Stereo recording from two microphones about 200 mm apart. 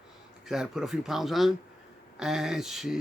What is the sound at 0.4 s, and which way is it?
Speech, centre (ahead or behind).